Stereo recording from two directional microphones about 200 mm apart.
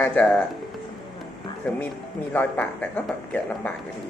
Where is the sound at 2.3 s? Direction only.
5° left (ahead or behind).